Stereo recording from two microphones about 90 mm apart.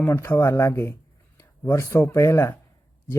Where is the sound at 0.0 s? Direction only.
30° left (ahead or behind).